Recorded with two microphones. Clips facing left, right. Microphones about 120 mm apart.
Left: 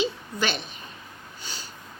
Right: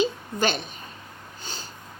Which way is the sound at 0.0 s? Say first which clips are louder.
Right 3 dB; 45° right (ahead or behind).